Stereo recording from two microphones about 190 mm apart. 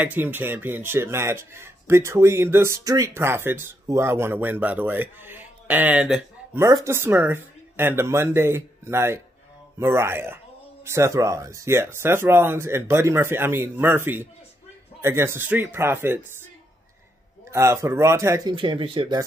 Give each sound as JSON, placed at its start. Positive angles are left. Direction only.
{"t": 0.0, "sound": "speech", "side_deg": -10}
{"t": 17.5, "sound": "speech", "side_deg": -15}
{"t": 18.5, "sound": "speech", "side_deg": -25}